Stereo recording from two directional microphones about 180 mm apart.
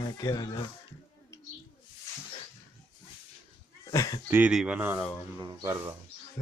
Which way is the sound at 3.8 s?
20° left (ahead or behind).